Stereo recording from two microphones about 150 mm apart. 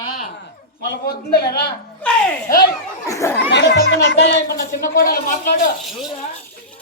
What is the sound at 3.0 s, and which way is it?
Speech, 20° left (ahead or behind).